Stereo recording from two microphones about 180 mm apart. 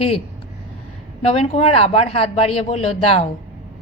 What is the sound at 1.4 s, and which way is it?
A woman's voice, 35° left (ahead or behind).